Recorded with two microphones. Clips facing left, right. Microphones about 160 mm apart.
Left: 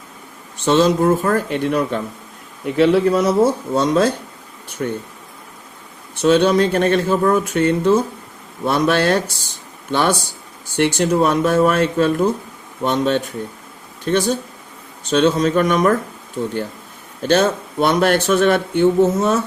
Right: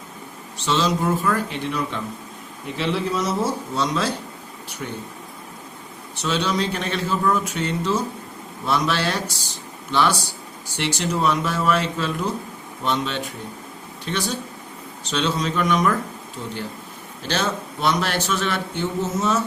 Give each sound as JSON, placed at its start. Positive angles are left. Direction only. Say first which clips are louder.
{"t": 0.6, "sound": "a man's voice", "louder": "left 7 dB", "side_deg": 50}
{"t": 6.2, "sound": "a man's voice", "louder": "left 10 dB", "side_deg": 55}